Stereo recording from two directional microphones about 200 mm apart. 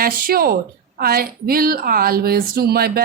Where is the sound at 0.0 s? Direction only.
50° right (ahead or behind).